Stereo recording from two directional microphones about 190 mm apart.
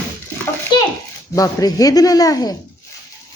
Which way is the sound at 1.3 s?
20° left (ahead or behind).